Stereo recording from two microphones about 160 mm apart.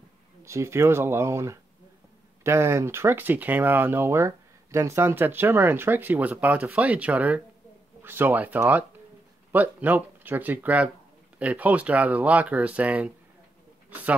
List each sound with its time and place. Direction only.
0.4 s speech: 15° right (ahead or behind)